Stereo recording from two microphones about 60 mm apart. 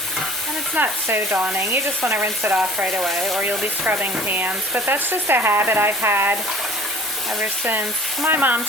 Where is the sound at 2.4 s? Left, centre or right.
Right.